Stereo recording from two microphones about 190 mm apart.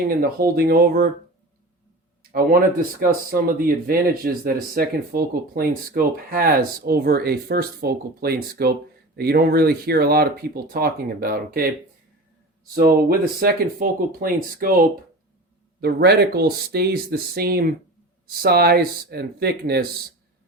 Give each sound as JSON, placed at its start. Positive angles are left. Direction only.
{"t": 0.2, "sound": "speech", "side_deg": -50}
{"t": 3.0, "sound": "speech", "side_deg": -50}
{"t": 12.7, "sound": "speech", "side_deg": -55}